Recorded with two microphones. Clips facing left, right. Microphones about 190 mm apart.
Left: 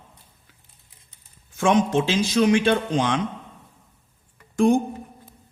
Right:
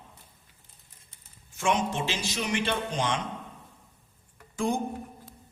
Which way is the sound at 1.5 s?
90° left.